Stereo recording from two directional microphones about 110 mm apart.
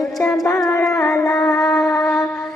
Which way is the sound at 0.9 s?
25° left (ahead or behind).